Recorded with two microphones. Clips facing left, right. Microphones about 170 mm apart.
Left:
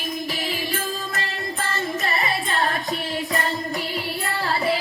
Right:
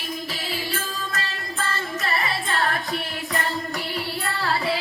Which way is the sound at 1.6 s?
20° left (ahead or behind).